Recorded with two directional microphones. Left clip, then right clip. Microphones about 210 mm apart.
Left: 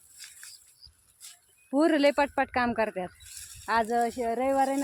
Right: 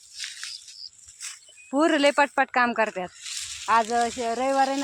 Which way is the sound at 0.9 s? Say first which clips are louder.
Right 8 dB; 25° left (ahead or behind).